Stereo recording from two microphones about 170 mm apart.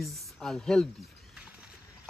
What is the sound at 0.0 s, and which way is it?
Speech, 5° left (ahead or behind).